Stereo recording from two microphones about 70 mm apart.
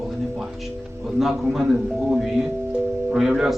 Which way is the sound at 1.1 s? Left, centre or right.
Centre.